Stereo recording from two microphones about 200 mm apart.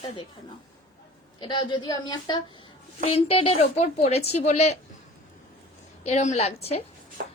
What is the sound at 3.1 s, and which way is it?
A woman's voice, 30° left (ahead or behind).